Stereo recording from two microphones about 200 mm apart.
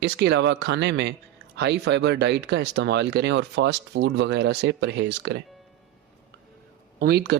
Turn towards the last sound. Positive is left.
turn(degrees=-55)  # may be behind; listen again after turning